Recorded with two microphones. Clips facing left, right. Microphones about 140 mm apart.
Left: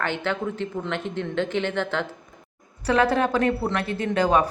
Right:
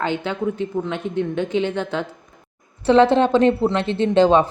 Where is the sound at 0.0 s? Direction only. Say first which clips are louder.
Right 4 dB; 15° right (ahead or behind).